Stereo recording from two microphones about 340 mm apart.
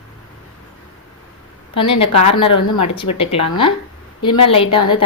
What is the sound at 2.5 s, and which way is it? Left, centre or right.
Speech, left.